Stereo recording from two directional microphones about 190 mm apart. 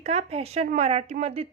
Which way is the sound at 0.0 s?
35° right (ahead or behind).